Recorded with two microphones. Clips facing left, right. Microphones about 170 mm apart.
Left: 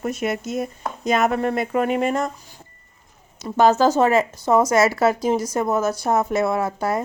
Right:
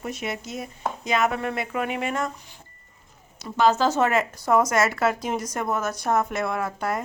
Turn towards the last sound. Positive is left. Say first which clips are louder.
# left 5 dB
turn(degrees=30)  # may be behind; listen again after turning